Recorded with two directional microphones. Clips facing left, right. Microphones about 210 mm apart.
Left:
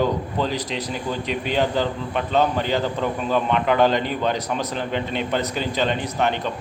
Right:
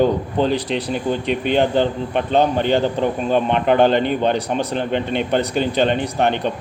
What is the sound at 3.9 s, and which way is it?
Speech, 60° right (ahead or behind).